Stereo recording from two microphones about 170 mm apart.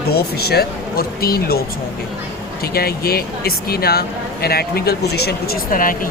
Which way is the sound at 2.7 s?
65° left (ahead or behind).